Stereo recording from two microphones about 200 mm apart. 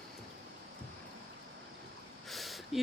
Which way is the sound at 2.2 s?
Centre (ahead or behind).